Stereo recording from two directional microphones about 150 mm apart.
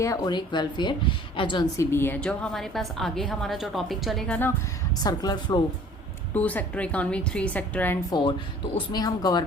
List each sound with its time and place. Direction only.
0.0 s a woman's voice: 25° left (ahead or behind)
1.8 s a woman's voice: 15° left (ahead or behind)
5.0 s a woman's voice: 25° left (ahead or behind)
6.3 s a woman's voice: 10° left (ahead or behind)
8.9 s a woman's voice: 30° left (ahead or behind)